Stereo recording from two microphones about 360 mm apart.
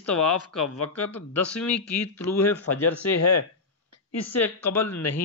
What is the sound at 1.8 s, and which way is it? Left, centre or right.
Speech, left.